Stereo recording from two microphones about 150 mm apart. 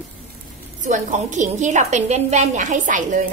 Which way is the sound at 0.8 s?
55° right (ahead or behind).